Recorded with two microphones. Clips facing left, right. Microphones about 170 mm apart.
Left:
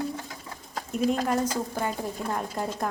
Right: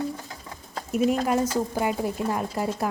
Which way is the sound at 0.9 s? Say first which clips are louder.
Right 3 dB; 5° right (ahead or behind).